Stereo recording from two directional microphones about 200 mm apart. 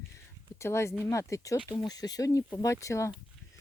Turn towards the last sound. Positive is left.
turn(degrees=15)  # may be behind; listen again after turning